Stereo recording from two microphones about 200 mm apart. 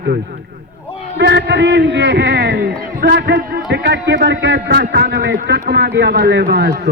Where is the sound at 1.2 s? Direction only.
60° right (ahead or behind).